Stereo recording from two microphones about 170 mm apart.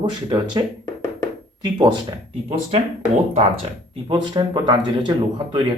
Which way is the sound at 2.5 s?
40° right (ahead or behind).